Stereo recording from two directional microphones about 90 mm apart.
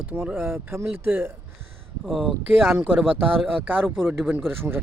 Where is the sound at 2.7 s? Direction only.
20° right (ahead or behind).